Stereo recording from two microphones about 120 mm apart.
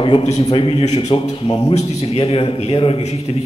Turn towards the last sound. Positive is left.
turn(degrees=60)  # may be behind; listen again after turning